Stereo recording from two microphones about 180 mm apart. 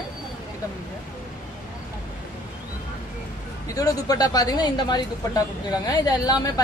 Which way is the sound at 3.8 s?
20° left (ahead or behind).